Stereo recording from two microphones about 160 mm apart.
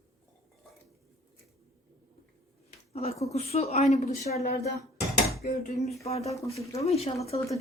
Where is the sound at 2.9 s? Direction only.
40° left (ahead or behind).